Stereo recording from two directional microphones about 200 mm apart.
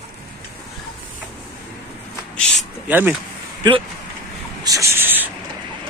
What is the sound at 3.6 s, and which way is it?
Speech, 25° right (ahead or behind).